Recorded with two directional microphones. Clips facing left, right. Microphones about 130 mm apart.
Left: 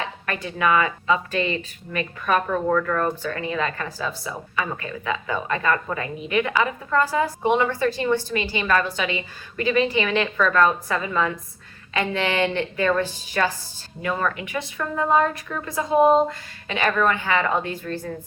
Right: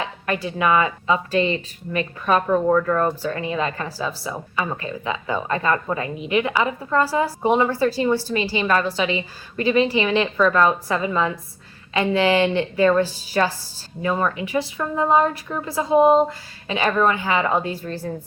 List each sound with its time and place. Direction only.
0.4 s a woman's voice: 25° right (ahead or behind)